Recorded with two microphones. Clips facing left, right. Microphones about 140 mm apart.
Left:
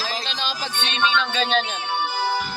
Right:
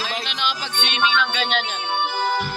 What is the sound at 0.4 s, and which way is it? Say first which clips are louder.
Music: right 2 dB; 35° left (ahead or behind).